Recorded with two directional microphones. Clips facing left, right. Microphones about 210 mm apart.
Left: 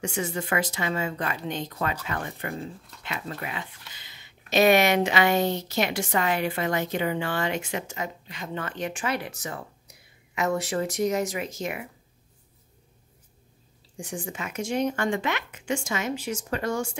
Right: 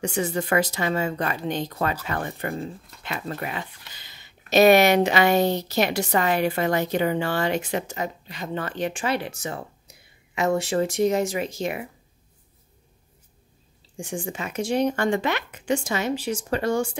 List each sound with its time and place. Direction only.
0.0 s speech: 35° right (ahead or behind)
13.9 s speech: 30° right (ahead or behind)